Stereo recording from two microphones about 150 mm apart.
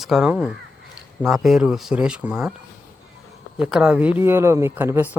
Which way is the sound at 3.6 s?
5° right (ahead or behind).